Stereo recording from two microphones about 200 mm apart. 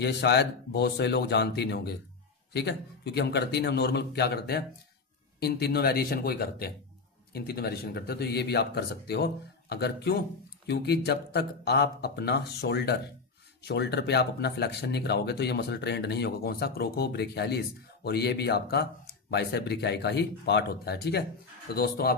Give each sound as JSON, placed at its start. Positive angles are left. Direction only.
{"t": 0.0, "sound": "speech", "side_deg": 60}